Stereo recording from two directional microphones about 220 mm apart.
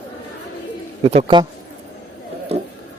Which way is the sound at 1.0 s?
25° right (ahead or behind).